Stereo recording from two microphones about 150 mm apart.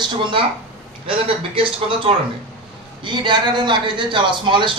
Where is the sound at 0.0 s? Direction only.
35° right (ahead or behind).